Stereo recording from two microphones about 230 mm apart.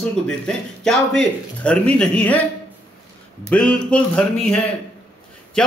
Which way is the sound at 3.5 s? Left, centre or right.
Centre.